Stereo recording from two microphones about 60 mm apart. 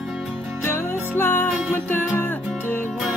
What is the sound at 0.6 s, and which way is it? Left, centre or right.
Music, left.